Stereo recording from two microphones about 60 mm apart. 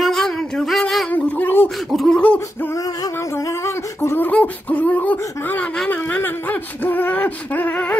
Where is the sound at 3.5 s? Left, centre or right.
Left.